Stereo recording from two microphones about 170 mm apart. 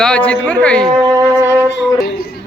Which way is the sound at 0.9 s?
20° right (ahead or behind).